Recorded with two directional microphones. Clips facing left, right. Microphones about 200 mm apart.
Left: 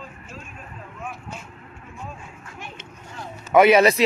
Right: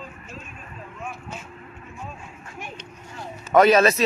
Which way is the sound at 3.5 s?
10° left (ahead or behind).